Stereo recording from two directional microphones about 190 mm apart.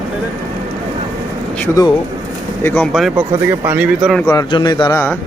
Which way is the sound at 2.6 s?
10° left (ahead or behind).